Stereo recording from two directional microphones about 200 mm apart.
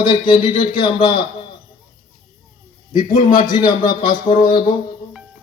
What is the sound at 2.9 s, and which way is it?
Speech, 40° left (ahead or behind).